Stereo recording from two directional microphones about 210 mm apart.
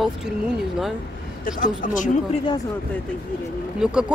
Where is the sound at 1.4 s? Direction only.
40° left (ahead or behind).